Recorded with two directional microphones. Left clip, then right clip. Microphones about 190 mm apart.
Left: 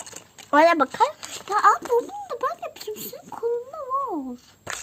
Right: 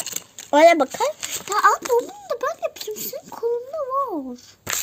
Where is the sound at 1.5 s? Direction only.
20° left (ahead or behind).